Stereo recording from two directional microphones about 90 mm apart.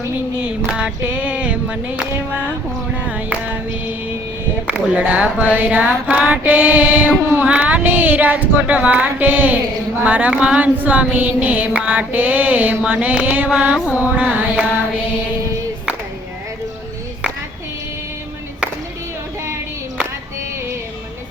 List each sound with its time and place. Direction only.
0.4 s mantra: 10° right (ahead or behind)
4.6 s speech: 15° right (ahead or behind)
5.5 s mantra: 15° right (ahead or behind)